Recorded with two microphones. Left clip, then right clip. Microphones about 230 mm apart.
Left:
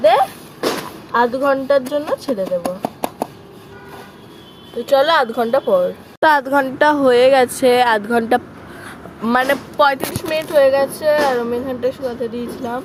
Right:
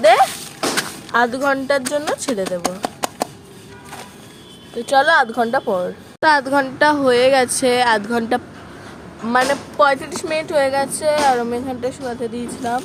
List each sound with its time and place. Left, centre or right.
0.0 s speech: right
2.6 s a sound: centre
4.9 s speech: centre
6.1 s speech: centre
9.3 s speech: left
10.2 s speech: centre